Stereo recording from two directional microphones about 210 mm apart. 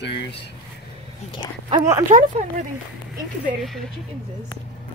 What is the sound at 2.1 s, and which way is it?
Speech, 35° right (ahead or behind).